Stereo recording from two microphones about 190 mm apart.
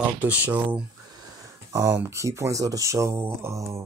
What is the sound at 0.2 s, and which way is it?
Speech, 10° right (ahead or behind).